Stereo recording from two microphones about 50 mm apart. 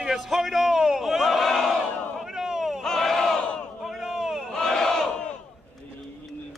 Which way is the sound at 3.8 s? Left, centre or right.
Centre.